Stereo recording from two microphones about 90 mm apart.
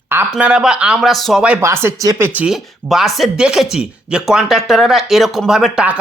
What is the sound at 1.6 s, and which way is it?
Speech, 25° right (ahead or behind).